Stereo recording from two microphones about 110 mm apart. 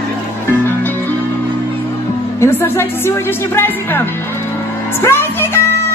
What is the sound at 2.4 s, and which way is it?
Speech, 25° left (ahead or behind).